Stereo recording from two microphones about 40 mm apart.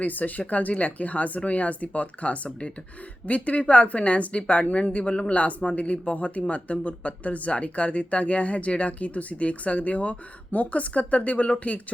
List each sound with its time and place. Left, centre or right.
0.0 s speech: left